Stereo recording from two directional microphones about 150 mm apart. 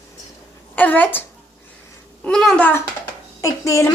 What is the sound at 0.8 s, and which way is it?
Speech, 10° left (ahead or behind).